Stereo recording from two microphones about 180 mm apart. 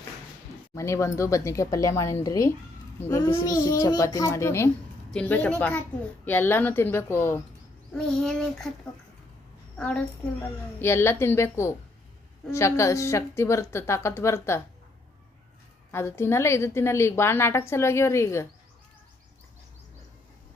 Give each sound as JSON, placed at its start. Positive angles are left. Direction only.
{"t": 0.7, "sound": "a woman's voice", "side_deg": 15}
{"t": 7.9, "sound": "child singing", "side_deg": 5}
{"t": 9.7, "sound": "a child's voice", "side_deg": 5}
{"t": 15.9, "sound": "a woman's voice", "side_deg": 15}